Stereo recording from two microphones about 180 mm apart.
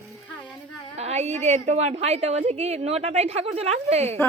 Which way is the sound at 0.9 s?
35° right (ahead or behind).